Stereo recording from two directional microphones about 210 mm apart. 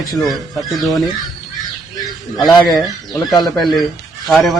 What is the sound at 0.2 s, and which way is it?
Speech, centre (ahead or behind).